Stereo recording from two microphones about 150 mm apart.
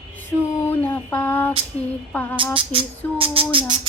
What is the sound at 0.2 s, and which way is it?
Female singing, 15° left (ahead or behind).